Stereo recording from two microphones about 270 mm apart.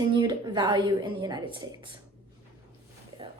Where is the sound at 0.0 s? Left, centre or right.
Centre.